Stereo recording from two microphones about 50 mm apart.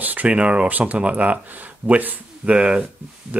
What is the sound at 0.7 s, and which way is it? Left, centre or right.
Speech, right.